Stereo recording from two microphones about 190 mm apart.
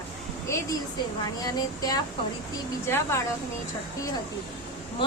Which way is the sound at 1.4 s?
20° left (ahead or behind).